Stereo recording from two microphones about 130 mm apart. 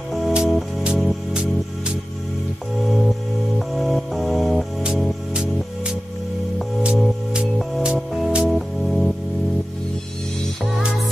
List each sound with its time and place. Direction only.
0.1 s music: 5° right (ahead or behind)
3.5 s music: centre (ahead or behind)